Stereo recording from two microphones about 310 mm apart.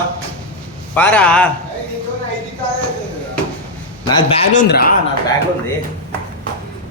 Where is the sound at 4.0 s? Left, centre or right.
Centre.